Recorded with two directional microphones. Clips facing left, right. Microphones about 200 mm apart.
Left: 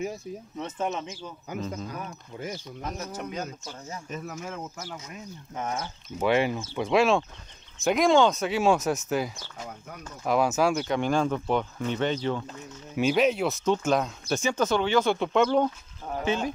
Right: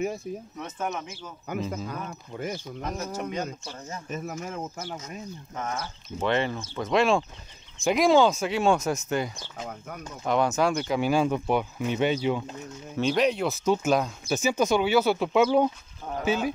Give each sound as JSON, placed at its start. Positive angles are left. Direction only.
{"t": 0.0, "sound": "speech", "side_deg": -55}
{"t": 1.5, "sound": "speech", "side_deg": -55}
{"t": 2.8, "sound": "speech", "side_deg": 0}
{"t": 4.1, "sound": "speech", "side_deg": -45}
{"t": 5.5, "sound": "speech", "side_deg": 15}
{"t": 12.9, "sound": "speech", "side_deg": 5}